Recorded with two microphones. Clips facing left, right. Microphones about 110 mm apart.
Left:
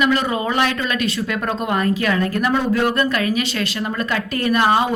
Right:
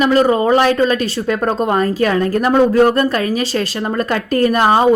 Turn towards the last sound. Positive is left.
turn(degrees=-40)  # may be behind; listen again after turning